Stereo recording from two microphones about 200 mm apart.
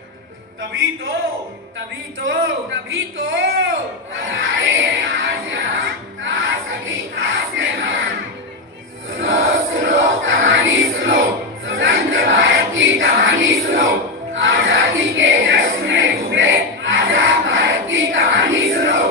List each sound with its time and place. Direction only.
2.9 s speech: 70° right (ahead or behind)
4.3 s music: 75° right (ahead or behind)
9.1 s music: 75° right (ahead or behind)